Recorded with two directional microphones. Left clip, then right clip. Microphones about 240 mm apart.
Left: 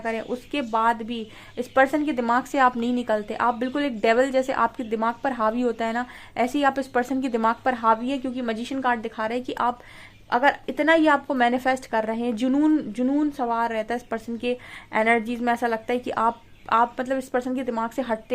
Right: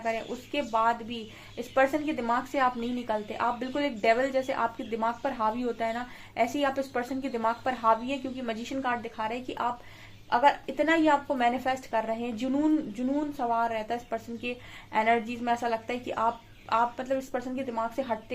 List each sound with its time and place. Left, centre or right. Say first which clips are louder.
0.0 s a woman's voice: left 3 dB; left